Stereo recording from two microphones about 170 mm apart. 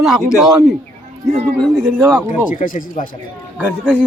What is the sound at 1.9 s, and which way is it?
Speech, 15° right (ahead or behind).